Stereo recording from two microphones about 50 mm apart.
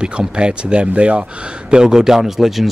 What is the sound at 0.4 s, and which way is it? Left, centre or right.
Speech, centre.